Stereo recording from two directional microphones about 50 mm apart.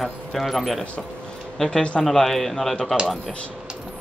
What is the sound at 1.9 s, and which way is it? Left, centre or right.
Speech, centre.